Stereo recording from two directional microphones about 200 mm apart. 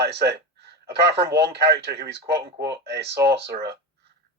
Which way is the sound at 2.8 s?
55° right (ahead or behind).